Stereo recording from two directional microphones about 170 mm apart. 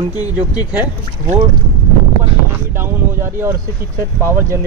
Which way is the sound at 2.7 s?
15° right (ahead or behind).